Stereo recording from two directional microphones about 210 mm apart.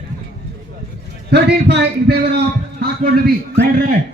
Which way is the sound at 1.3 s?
50° right (ahead or behind).